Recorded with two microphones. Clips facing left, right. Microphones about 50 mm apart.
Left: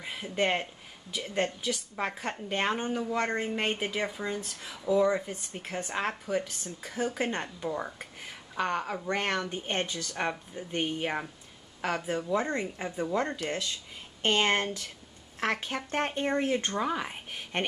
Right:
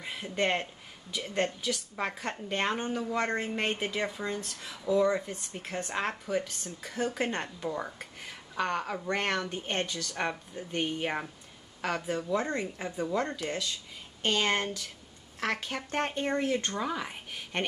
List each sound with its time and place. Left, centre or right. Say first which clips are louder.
0.0 s speech: left 1 dB; centre
14.2 s speech: left 2 dB; left